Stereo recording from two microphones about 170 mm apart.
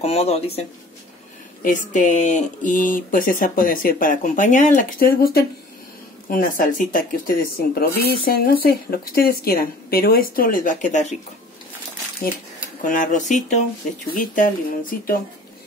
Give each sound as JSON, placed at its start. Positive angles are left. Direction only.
{"t": 0.0, "sound": "speech", "side_deg": 35}
{"t": 1.6, "sound": "speech", "side_deg": 50}
{"t": 7.8, "sound": "speech", "side_deg": 65}
{"t": 12.8, "sound": "speech", "side_deg": 50}